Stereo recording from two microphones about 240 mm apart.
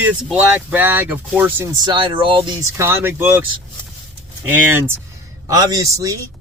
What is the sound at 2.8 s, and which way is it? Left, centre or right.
Speech, centre.